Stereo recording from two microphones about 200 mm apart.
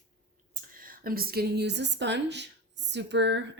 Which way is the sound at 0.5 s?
45° right (ahead or behind).